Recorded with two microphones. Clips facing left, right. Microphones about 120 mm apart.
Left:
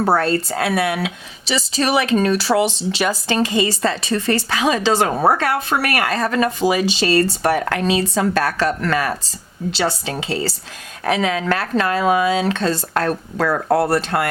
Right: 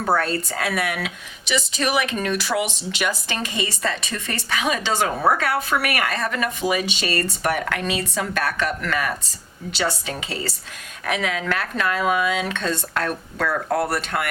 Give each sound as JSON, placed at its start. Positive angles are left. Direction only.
{"t": 0.0, "sound": "speech", "side_deg": 35}